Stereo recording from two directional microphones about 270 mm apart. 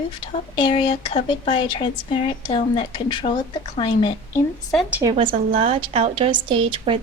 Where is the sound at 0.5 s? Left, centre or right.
Centre.